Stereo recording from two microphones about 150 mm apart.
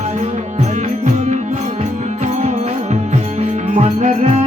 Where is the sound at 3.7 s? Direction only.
45° right (ahead or behind).